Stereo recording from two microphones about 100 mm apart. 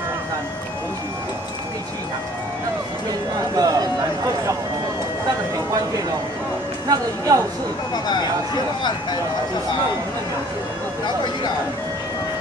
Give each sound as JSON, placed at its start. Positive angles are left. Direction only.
{"t": 3.5, "sound": "a sound", "side_deg": -40}
{"t": 6.9, "sound": "speech", "side_deg": -35}
{"t": 7.9, "sound": "speech", "side_deg": 45}